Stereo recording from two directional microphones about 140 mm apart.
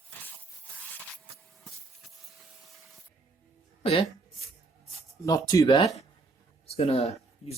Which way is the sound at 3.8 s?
40° left (ahead or behind).